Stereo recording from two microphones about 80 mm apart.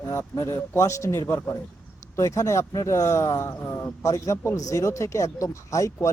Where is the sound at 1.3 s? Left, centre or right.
Left.